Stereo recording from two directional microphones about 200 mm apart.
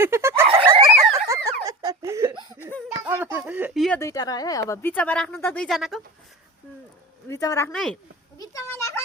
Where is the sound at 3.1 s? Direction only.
10° right (ahead or behind).